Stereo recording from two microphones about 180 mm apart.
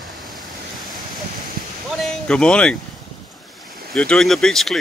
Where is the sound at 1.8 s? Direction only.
5° left (ahead or behind).